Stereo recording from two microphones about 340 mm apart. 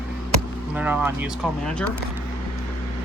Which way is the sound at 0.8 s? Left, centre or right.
Centre.